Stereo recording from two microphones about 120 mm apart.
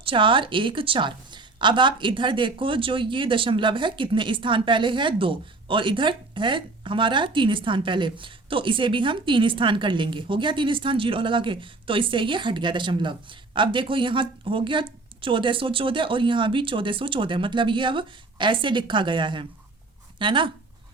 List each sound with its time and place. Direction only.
0.0 s a woman's voice: 45° right (ahead or behind)